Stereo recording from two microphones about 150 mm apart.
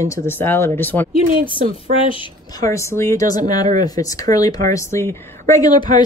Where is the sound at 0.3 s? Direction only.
15° left (ahead or behind).